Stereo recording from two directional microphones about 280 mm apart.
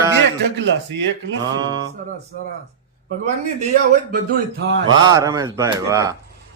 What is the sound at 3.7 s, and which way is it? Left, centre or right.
A man's voice, right.